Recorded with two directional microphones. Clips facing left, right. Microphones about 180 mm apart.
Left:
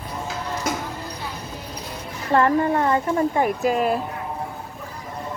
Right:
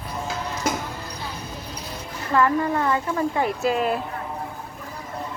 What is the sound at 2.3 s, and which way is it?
Speech, 30° left (ahead or behind).